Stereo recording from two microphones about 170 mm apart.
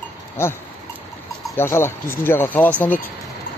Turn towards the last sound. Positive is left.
turn(degrees=10)  # may be behind; listen again after turning